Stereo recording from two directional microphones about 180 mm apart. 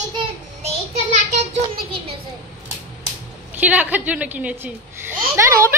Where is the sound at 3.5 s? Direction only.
10° right (ahead or behind).